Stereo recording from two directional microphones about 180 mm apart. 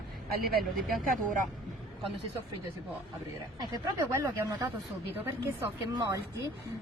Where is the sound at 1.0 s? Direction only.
50° right (ahead or behind).